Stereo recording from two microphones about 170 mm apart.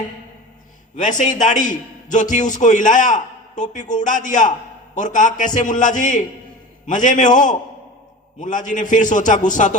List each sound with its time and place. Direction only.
0.9 s a man's voice: 50° left (ahead or behind)